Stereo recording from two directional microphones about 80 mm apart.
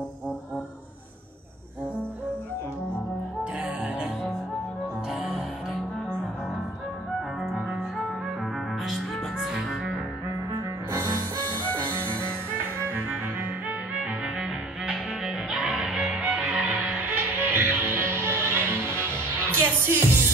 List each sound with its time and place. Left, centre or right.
8.8 s music: centre
12.7 s music: right
13.7 s music: centre; by 20.1 s right